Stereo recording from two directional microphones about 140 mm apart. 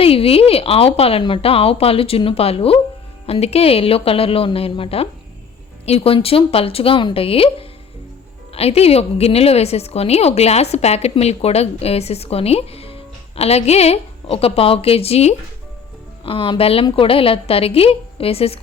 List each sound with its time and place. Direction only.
0.0 s a woman's voice: 45° left (ahead or behind)